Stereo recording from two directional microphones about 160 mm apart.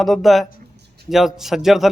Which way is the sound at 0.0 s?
Centre (ahead or behind).